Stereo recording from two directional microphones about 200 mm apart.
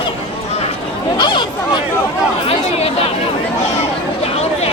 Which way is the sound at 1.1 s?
25° left (ahead or behind).